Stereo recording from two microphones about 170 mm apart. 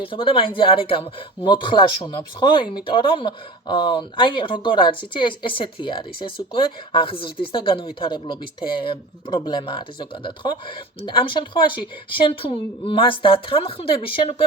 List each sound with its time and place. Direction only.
0.0 s speech: 30° left (ahead or behind)